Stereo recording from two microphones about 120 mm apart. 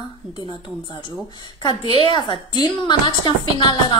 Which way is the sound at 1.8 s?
50° right (ahead or behind).